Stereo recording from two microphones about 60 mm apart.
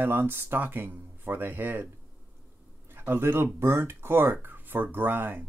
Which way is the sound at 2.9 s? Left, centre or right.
Right.